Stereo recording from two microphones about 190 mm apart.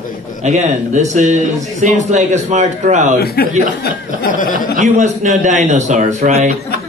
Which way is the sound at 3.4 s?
55° left (ahead or behind).